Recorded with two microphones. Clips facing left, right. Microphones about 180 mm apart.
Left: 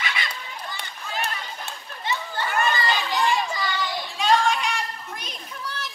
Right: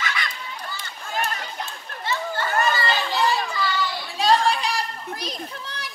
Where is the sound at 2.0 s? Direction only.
15° left (ahead or behind).